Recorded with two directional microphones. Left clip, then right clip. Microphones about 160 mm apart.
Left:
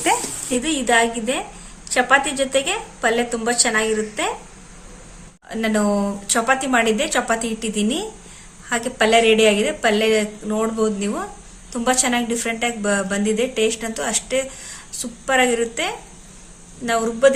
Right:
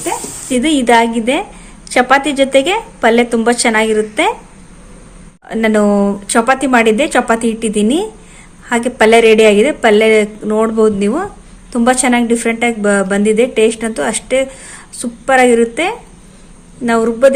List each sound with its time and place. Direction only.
0.6 s a woman's voice: 50° right (ahead or behind)
5.5 s a woman's voice: 55° right (ahead or behind)